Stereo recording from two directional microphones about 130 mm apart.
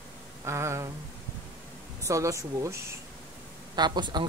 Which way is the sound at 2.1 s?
25° right (ahead or behind).